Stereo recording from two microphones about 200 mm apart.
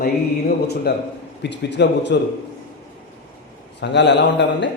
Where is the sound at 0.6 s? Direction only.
55° left (ahead or behind).